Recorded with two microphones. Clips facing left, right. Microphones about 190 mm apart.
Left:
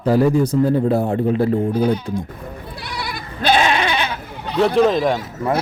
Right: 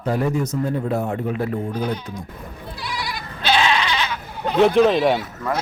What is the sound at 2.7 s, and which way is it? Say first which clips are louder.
Goat: right 1 dB; 50° left (ahead or behind).